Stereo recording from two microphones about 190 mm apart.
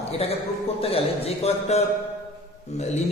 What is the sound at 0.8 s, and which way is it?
A man's voice, 30° left (ahead or behind).